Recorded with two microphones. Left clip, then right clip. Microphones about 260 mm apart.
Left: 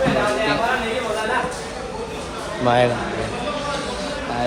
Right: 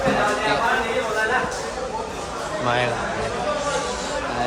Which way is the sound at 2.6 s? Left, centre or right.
Centre.